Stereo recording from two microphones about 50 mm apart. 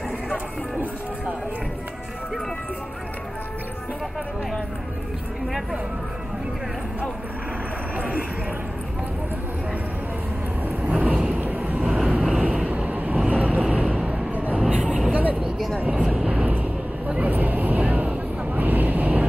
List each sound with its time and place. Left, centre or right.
8.0 s a sound: right
10.8 s vehicle: right
12.1 s vehicle: centre
12.6 s vehicle: right
13.3 s a sound: right
14.7 s vehicle: right